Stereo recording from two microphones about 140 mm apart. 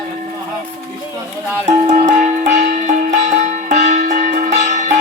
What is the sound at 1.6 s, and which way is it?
Music, 60° right (ahead or behind).